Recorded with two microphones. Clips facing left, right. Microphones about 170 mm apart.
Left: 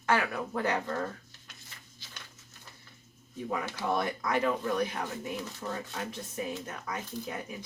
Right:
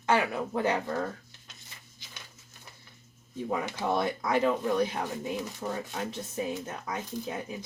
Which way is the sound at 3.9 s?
25° right (ahead or behind).